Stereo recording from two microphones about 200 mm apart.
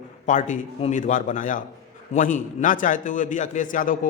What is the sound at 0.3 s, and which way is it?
A man's voice, 40° left (ahead or behind).